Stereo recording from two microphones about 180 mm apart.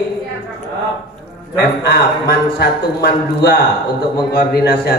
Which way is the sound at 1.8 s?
60° left (ahead or behind).